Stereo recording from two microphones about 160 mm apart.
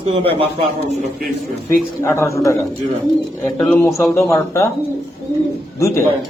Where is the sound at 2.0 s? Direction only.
15° left (ahead or behind).